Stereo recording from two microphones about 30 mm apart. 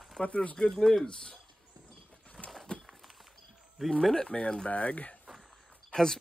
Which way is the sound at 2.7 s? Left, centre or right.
Left.